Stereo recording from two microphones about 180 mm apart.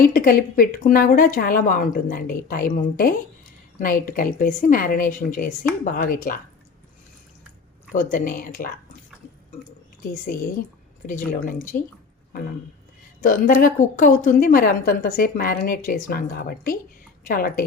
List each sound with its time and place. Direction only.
0.0 s a woman's voice: 50° left (ahead or behind)
7.9 s a woman's voice: 50° left (ahead or behind)
11.3 s a woman's voice: 45° left (ahead or behind)
13.2 s a woman's voice: 45° left (ahead or behind)